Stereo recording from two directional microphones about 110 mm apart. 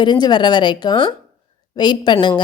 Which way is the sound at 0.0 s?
45° left (ahead or behind).